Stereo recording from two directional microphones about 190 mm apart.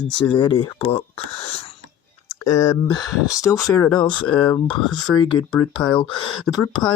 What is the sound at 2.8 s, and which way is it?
Speech, 20° left (ahead or behind).